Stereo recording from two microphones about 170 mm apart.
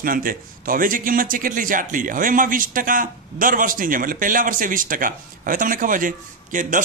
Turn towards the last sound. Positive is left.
turn(degrees=-50)  # may be behind; listen again after turning